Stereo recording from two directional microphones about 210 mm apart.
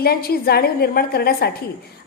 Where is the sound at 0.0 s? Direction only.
45° left (ahead or behind).